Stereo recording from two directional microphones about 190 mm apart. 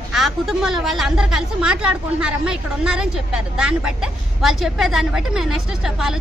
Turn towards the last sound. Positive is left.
turn(degrees=0)  # may be behind; listen again after turning